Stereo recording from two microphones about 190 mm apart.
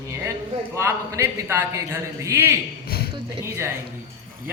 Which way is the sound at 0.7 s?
15° right (ahead or behind).